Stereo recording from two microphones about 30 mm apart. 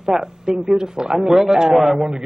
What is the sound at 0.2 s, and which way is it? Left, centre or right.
Speech, right.